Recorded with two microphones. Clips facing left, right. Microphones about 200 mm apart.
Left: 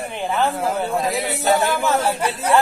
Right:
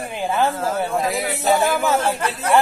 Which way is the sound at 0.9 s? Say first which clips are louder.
Even; centre (ahead or behind).